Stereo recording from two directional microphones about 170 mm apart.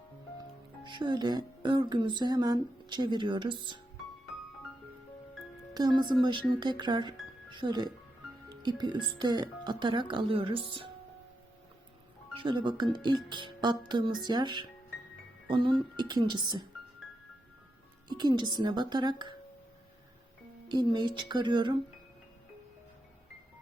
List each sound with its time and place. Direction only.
0.9 s music: 25° right (ahead or behind)
5.7 s speech: 25° right (ahead or behind)
6.2 s music: 25° right (ahead or behind)
12.4 s music: 30° right (ahead or behind)
18.1 s music: 25° right (ahead or behind)
20.7 s music: 25° right (ahead or behind)